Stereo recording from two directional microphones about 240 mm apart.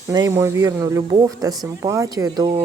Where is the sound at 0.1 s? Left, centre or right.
Centre.